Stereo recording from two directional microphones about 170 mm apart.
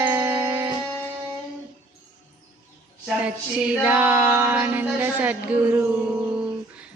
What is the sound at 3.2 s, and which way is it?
Female singing, 5° right (ahead or behind).